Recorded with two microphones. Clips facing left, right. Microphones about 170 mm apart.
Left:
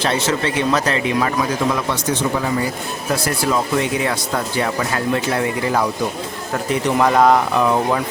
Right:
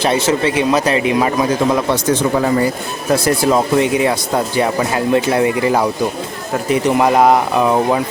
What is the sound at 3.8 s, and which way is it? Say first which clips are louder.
A man's voice: right 6 dB; 20° right (ahead or behind).